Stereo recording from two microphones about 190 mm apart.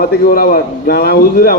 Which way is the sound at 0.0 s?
50° left (ahead or behind).